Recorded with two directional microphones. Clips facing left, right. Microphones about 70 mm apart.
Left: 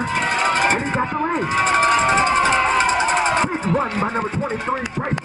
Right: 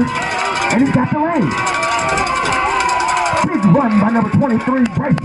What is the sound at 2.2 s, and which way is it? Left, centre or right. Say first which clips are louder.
Run: even; left.